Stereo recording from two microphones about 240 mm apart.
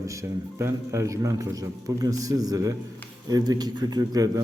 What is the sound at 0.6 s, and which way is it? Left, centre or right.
A man's voice, centre.